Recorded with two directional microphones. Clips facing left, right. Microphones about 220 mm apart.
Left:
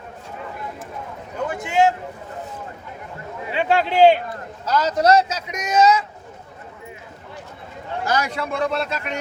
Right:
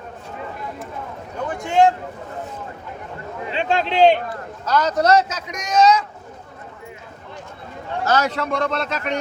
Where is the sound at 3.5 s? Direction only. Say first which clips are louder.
Left 1 dB; 10° left (ahead or behind).